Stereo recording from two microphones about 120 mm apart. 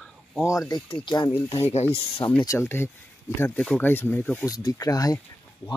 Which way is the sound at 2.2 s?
15° left (ahead or behind).